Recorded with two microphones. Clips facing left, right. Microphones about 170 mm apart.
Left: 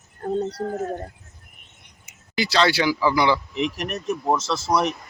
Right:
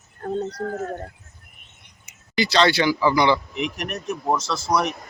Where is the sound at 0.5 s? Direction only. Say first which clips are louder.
Left 1 dB; 25° left (ahead or behind).